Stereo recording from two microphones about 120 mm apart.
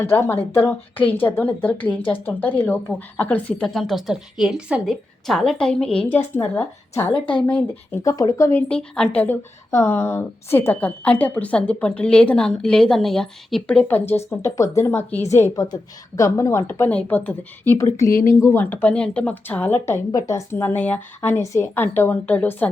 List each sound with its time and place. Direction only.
0.0 s a woman's voice: 20° left (ahead or behind)
3.7 s a woman's voice: centre (ahead or behind)
5.2 s a woman's voice: 5° left (ahead or behind); by 8.6 s 25° left (ahead or behind)
8.7 s a woman's voice: 10° left (ahead or behind)
14.3 s a woman's voice: 25° left (ahead or behind)
20.1 s a woman's voice: 30° left (ahead or behind); by 22.7 s 15° left (ahead or behind)